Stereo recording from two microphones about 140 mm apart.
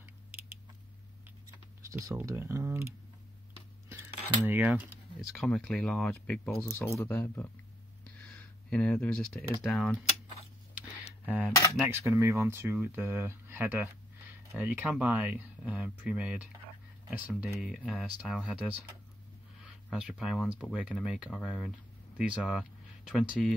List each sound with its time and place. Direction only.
1.9 s speech: 25° right (ahead or behind)
4.5 s speech: 10° right (ahead or behind)
5.4 s speech: 5° left (ahead or behind)
8.2 s a sound: 10° left (ahead or behind)
9.6 s speech: centre (ahead or behind)
11.2 s speech: 10° right (ahead or behind)